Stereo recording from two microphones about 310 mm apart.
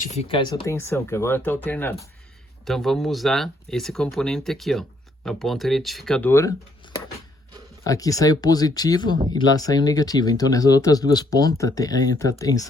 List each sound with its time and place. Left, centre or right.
0.0 s speech: centre